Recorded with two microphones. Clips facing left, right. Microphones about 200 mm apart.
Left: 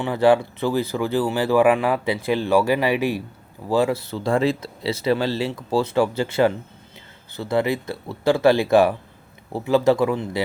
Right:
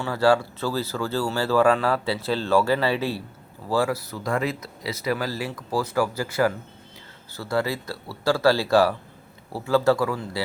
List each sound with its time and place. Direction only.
0.0 s speech: 20° left (ahead or behind)